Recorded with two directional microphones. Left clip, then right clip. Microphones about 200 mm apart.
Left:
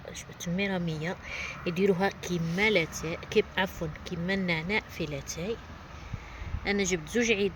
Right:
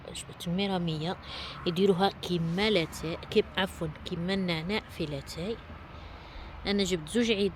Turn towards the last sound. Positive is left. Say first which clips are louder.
# left 1 dB
turn(degrees=-15)  # may be behind; listen again after turning